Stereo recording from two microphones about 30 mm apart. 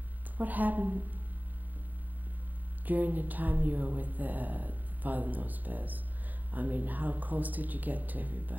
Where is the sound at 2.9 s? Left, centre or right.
Right.